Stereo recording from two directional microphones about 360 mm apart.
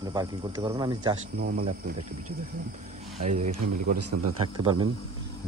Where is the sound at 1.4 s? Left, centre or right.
Right.